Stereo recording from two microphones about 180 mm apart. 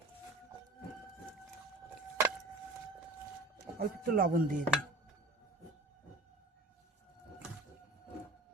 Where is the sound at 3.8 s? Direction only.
55° right (ahead or behind).